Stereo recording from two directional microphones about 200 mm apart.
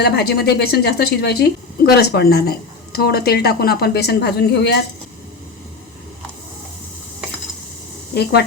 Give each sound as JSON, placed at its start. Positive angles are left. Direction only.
{"t": 0.0, "sound": "a woman's voice", "side_deg": 50}
{"t": 8.1, "sound": "speech", "side_deg": 55}